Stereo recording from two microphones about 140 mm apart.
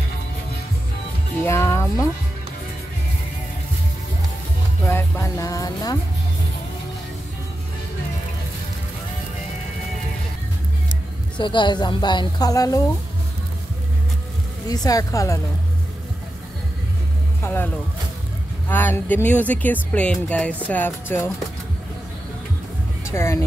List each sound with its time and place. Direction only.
1.4 s music: 20° left (ahead or behind)
4.8 s music: 15° left (ahead or behind)
11.3 s a woman's voice: 35° left (ahead or behind)
14.7 s speech: 25° left (ahead or behind)
17.4 s speech: 15° left (ahead or behind)
18.7 s speech: 15° left (ahead or behind)
23.0 s speech: 20° left (ahead or behind)